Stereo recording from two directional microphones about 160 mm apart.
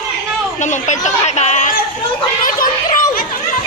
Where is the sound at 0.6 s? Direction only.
50° left (ahead or behind).